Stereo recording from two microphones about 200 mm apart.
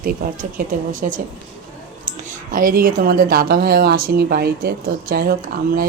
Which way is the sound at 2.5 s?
45° right (ahead or behind).